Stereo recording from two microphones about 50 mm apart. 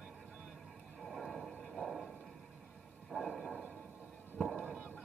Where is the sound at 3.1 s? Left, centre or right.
Centre.